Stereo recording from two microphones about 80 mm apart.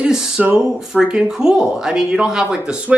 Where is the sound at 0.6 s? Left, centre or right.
Centre.